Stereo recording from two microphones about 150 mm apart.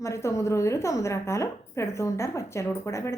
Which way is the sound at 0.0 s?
20° left (ahead or behind).